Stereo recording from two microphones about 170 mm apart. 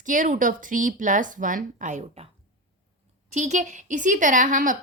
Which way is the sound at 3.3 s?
45° right (ahead or behind).